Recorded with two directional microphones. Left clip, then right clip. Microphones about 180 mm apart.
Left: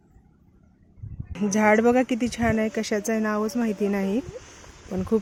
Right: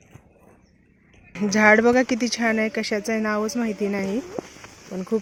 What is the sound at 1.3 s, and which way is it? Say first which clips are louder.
Speech: right 4 dB; 5° left (ahead or behind).